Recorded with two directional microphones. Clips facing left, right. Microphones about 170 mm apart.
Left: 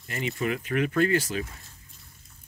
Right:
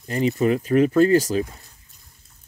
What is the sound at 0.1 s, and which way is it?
Speech, 35° right (ahead or behind).